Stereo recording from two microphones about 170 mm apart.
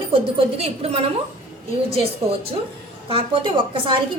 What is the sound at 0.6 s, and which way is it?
Speech, 35° right (ahead or behind).